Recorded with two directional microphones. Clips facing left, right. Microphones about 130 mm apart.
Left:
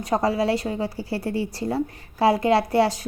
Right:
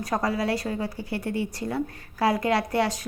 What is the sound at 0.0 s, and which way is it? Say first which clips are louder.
A woman's voice: left 4 dB; 25° left (ahead or behind).